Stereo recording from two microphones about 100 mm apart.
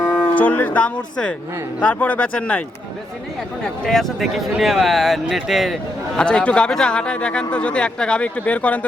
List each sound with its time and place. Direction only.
0.0 s a man's voice: 20° left (ahead or behind)
3.8 s speech: 5° left (ahead or behind)
6.1 s a man's voice: 10° left (ahead or behind)